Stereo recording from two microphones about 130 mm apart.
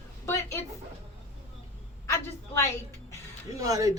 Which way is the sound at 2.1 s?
20° left (ahead or behind).